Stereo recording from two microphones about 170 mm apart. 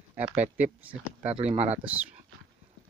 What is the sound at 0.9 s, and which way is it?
Speech, 40° right (ahead or behind).